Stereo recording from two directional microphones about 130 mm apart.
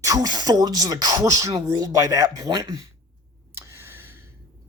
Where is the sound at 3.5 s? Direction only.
20° right (ahead or behind).